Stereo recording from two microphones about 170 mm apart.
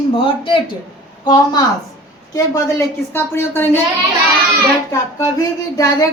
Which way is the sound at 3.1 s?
15° left (ahead or behind).